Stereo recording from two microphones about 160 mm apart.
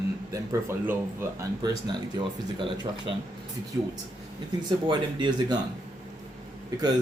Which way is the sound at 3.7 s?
15° right (ahead or behind).